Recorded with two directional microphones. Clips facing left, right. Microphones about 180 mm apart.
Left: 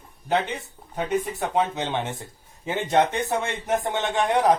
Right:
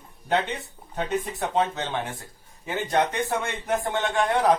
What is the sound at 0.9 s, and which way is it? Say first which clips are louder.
A man's voice: left 2 dB; 10° left (ahead or behind).